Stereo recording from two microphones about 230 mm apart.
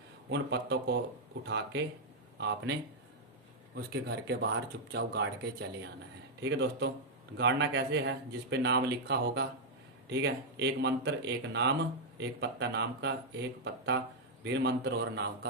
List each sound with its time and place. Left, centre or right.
0.3 s speech: right